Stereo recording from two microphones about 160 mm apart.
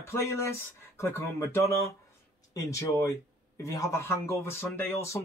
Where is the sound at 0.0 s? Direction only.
15° left (ahead or behind).